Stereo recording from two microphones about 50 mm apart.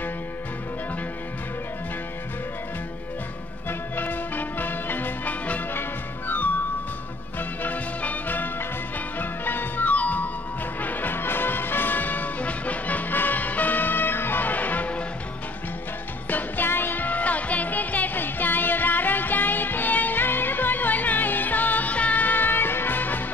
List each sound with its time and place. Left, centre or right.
3.6 s music: left
16.3 s music: left